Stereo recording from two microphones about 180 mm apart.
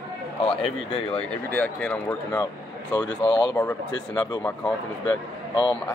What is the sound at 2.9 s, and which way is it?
Speech, 25° left (ahead or behind).